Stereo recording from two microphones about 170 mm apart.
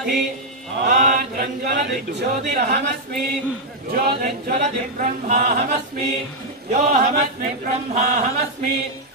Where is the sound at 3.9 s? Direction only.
60° right (ahead or behind).